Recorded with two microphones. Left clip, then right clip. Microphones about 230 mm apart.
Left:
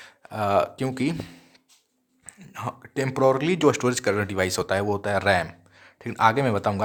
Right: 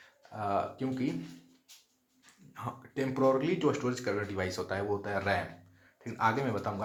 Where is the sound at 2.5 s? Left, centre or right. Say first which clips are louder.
Left 8 dB; left.